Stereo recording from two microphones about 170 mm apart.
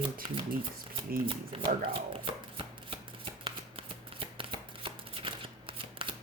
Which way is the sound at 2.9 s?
30° right (ahead or behind).